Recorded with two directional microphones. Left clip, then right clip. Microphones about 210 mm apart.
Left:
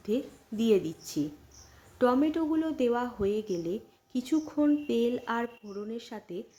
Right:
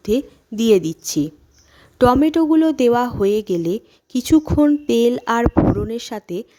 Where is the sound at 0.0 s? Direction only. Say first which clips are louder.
Right 12 dB; 50° right (ahead or behind).